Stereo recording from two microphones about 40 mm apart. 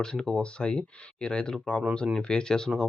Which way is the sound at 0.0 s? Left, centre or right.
Centre.